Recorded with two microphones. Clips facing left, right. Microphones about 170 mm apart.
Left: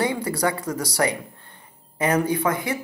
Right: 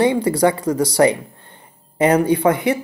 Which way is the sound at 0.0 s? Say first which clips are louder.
Right 8 dB; 25° right (ahead or behind).